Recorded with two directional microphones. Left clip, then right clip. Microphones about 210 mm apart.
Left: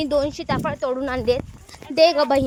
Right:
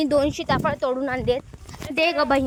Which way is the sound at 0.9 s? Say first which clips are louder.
Left 1 dB; 10° left (ahead or behind).